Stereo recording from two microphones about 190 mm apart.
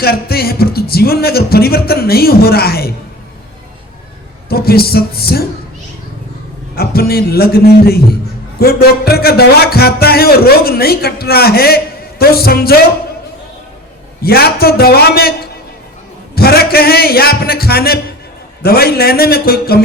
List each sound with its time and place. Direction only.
0.0 s speech: 55° left (ahead or behind)
4.4 s a sound: 55° left (ahead or behind)
6.7 s speech: 55° left (ahead or behind)
14.2 s speech: 55° left (ahead or behind)